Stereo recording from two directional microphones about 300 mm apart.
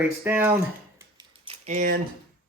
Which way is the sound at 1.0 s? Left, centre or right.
Centre.